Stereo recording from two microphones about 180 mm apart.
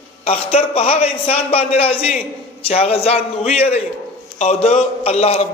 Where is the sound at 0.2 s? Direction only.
30° left (ahead or behind).